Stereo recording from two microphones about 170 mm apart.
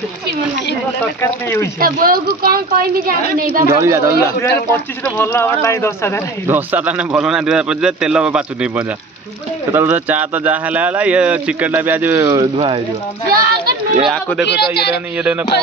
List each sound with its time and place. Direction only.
1.2 s speech: 15° left (ahead or behind)
1.8 s a woman's voice: 60° right (ahead or behind)
3.6 s speech: 15° right (ahead or behind)
5.0 s speech: 15° left (ahead or behind)
6.4 s a man's voice: 10° right (ahead or behind)
12.3 s speech: 30° right (ahead or behind)
13.3 s speech: 65° right (ahead or behind)
14.0 s a man's voice: centre (ahead or behind)
14.4 s a man's voice: 75° left (ahead or behind)
15.1 s a man's voice: 5° right (ahead or behind)